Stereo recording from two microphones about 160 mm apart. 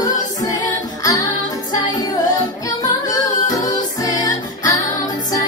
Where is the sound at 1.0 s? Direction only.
25° left (ahead or behind).